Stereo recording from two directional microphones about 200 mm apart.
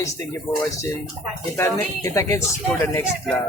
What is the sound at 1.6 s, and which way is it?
Speech, 15° left (ahead or behind).